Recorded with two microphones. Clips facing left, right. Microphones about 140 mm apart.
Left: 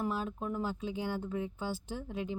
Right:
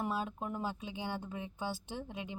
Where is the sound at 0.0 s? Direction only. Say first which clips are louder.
Left 2 dB; 20° right (ahead or behind).